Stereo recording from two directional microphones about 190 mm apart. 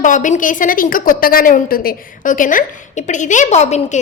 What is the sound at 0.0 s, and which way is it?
A woman's voice, 40° left (ahead or behind).